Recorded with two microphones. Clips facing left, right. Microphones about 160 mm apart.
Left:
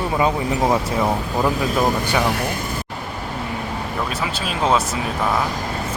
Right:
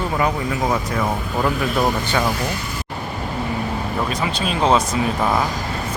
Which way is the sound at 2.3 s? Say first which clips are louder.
Left 1 dB; 55° left (ahead or behind).